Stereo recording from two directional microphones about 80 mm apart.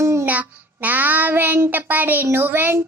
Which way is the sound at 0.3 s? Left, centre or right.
Right.